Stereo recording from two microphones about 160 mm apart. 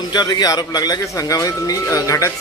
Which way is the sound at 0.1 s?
25° left (ahead or behind).